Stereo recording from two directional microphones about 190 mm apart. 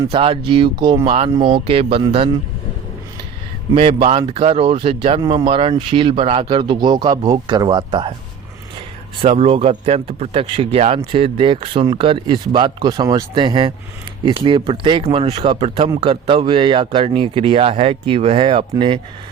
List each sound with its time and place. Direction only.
0.1 s speech: 30° right (ahead or behind)
3.8 s speech: 30° right (ahead or behind)
9.2 s speech: 30° right (ahead or behind)